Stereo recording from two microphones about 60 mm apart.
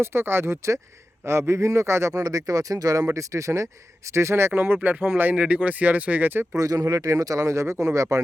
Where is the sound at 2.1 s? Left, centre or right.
Right.